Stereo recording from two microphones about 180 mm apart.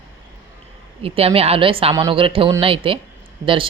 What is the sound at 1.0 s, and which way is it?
A woman's voice, 30° right (ahead or behind).